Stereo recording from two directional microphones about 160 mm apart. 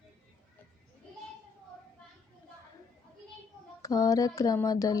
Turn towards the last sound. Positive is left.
turn(degrees=20)  # may be behind; listen again after turning